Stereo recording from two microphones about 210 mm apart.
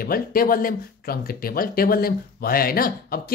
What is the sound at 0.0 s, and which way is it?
Speech, 45° left (ahead or behind).